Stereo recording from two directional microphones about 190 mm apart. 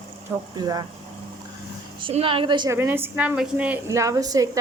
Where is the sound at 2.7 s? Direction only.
10° right (ahead or behind).